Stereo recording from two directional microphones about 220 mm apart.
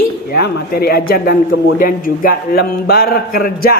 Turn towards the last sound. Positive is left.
turn(degrees=40)  # may be behind; listen again after turning